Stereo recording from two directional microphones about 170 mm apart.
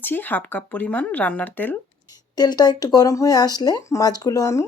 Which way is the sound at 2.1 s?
25° left (ahead or behind).